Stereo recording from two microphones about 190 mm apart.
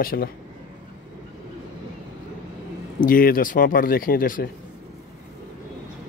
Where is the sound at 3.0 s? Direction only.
50° left (ahead or behind).